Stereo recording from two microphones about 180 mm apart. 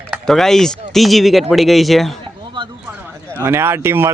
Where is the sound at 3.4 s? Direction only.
15° right (ahead or behind).